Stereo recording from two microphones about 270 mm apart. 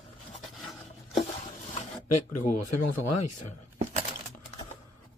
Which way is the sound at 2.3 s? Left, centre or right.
Left.